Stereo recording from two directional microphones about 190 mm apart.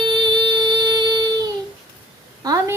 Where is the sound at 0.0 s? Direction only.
25° right (ahead or behind).